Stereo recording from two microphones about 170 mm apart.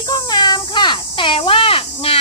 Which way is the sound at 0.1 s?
25° left (ahead or behind).